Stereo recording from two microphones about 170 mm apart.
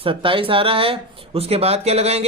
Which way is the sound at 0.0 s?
30° right (ahead or behind).